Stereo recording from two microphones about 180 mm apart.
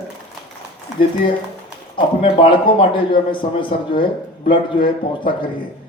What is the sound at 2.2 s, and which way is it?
A man's voice, 30° left (ahead or behind).